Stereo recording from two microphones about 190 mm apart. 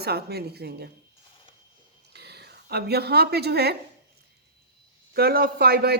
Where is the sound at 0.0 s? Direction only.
55° right (ahead or behind).